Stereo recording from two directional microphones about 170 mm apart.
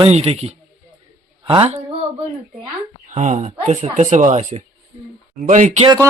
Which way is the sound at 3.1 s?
45° right (ahead or behind).